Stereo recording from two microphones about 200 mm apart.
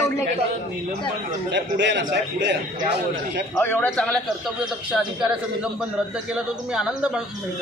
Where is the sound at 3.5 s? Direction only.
10° left (ahead or behind).